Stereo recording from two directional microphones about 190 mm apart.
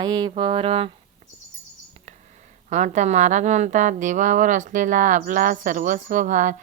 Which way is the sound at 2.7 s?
40° right (ahead or behind).